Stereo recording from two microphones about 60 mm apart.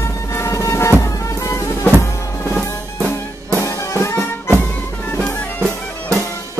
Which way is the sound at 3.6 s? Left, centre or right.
Left.